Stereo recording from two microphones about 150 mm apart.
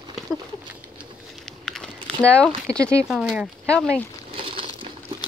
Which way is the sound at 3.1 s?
5° right (ahead or behind).